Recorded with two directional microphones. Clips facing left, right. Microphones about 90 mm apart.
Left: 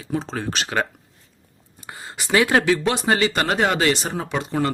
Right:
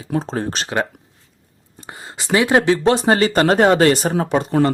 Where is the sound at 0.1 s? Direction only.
40° right (ahead or behind).